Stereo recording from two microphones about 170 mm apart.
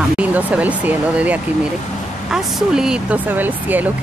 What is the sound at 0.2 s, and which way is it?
Speech, 10° right (ahead or behind).